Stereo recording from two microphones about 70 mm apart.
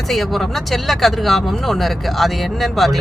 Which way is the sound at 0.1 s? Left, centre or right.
Centre.